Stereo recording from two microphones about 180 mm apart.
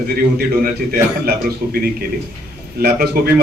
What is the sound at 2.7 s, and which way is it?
Speech, 60° right (ahead or behind).